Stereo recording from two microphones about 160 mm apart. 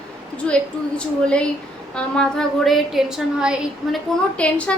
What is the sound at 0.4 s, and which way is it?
A woman's voice, 5° left (ahead or behind).